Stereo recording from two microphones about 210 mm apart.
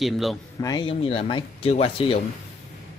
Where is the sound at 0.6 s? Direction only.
20° left (ahead or behind).